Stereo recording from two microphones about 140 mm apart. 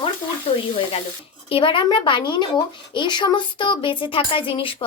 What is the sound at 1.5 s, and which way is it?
Speech, 40° left (ahead or behind).